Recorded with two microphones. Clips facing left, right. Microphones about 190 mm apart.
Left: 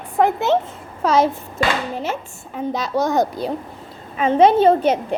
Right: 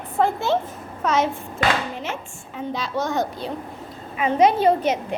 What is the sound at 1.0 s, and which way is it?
Speech, 35° left (ahead or behind).